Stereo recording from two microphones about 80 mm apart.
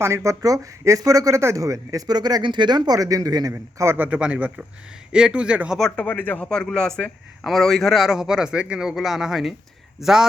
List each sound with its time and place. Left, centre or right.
0.0 s speech: right
3.5 s a man's voice: right
4.0 s speech: centre
6.0 s speech: left
6.5 s a man's voice: centre